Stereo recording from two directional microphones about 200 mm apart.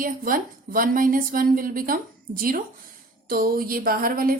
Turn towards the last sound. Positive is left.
turn(degrees=-45)  # may be behind; listen again after turning